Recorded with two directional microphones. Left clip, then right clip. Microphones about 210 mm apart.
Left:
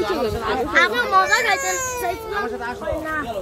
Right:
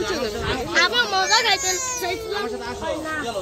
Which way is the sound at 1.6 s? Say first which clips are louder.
Left 2 dB; 40° left (ahead or behind).